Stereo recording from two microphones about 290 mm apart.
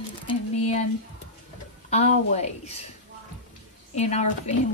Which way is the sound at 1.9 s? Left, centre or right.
Left.